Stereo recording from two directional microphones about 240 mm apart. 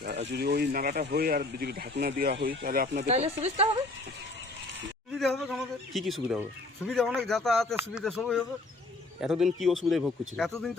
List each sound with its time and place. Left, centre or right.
0.3 s speech: right
3.1 s speech: right
5.1 s speech: centre